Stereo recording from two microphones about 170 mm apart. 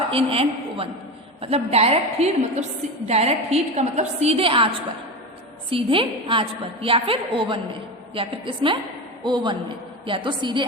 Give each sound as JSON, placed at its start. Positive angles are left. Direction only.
{"t": 0.1, "sound": "a woman's voice", "side_deg": -35}
{"t": 5.7, "sound": "a woman's voice", "side_deg": -30}